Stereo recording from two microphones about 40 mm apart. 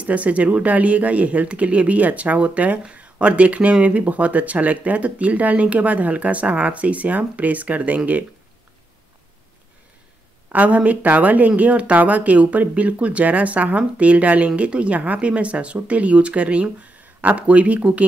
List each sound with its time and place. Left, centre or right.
0.0 s speech: right
10.5 s speech: right